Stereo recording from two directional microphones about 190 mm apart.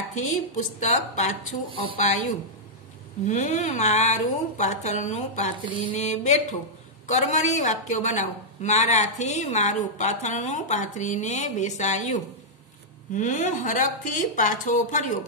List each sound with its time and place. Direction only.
0.3 s a woman's voice: 40° left (ahead or behind)